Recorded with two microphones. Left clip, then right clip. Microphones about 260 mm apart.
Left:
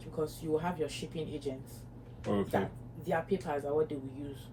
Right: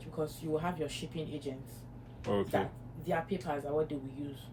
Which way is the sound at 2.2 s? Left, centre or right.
Right.